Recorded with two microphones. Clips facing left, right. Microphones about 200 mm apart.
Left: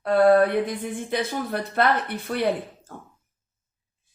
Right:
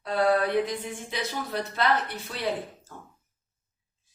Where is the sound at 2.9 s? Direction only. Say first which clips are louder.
Left 4 dB; 55° left (ahead or behind).